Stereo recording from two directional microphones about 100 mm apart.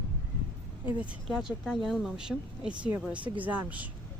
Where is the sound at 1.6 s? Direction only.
5° right (ahead or behind).